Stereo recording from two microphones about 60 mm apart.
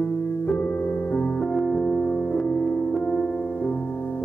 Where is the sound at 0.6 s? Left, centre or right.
Centre.